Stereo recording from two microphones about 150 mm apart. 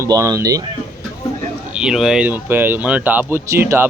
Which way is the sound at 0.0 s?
20° right (ahead or behind).